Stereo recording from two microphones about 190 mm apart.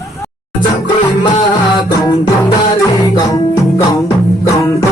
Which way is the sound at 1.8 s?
20° left (ahead or behind).